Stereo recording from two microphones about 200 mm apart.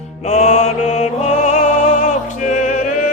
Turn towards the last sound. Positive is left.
turn(degrees=40)  # may be behind; listen again after turning